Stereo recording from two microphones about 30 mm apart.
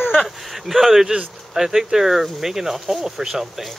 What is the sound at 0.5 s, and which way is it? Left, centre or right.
Speech, centre.